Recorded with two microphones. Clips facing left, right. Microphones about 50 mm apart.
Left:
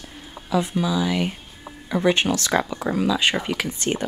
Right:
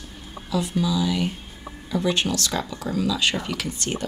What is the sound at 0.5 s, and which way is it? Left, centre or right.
Speech, left.